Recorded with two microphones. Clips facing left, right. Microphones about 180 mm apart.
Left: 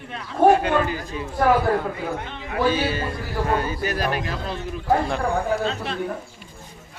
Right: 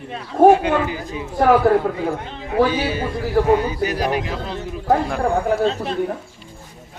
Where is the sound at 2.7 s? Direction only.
15° right (ahead or behind).